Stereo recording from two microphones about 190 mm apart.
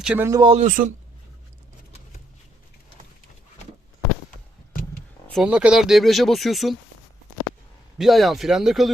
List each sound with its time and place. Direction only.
0.0 s speech: 5° right (ahead or behind)
0.3 s speech: 20° right (ahead or behind)
0.5 s speech: 40° right (ahead or behind)
5.3 s speech: 5° right (ahead or behind)
7.9 s speech: centre (ahead or behind)